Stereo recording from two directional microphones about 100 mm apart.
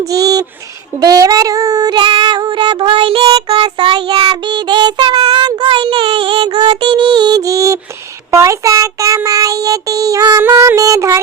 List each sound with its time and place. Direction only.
0.1 s speech: 40° right (ahead or behind)
0.9 s child singing: 40° right (ahead or behind); by 3.2 s 65° right (ahead or behind)
3.5 s child singing: 50° right (ahead or behind); by 4.4 s 65° right (ahead or behind)
4.4 s child singing: 50° right (ahead or behind)
10.8 s music: 35° right (ahead or behind)